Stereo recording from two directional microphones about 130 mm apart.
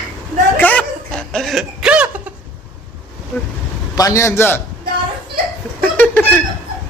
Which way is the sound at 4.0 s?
25° left (ahead or behind).